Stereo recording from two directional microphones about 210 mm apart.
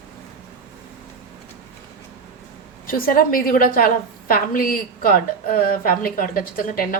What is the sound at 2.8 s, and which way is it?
A woman's voice, 45° left (ahead or behind).